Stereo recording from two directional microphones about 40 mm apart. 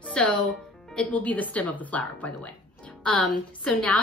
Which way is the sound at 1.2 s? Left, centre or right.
Left.